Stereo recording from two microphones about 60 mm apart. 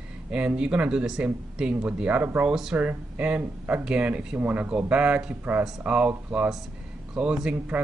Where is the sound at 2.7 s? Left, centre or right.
Right.